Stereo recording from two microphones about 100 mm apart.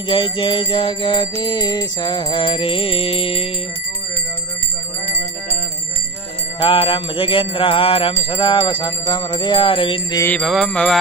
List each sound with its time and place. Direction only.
0.1 s music: 60° left (ahead or behind)
6.6 s music: 60° left (ahead or behind)
10.4 s music: centre (ahead or behind)